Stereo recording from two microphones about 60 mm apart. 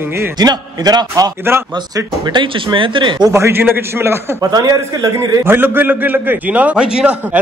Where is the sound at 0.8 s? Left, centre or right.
Right.